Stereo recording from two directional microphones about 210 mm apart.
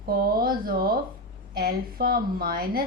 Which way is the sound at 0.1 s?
45° right (ahead or behind).